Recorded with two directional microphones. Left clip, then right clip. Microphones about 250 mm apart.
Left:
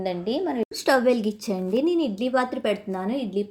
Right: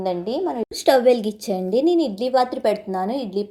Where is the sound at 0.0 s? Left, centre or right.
Right.